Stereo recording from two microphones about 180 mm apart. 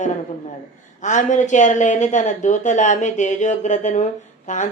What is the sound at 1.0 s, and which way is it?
Speech, 45° left (ahead or behind).